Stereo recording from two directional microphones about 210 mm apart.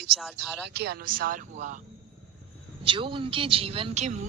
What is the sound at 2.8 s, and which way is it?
A woman's voice, 25° right (ahead or behind).